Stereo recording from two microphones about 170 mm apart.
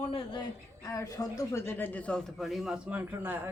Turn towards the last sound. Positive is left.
turn(degrees=-10)  # may be behind; listen again after turning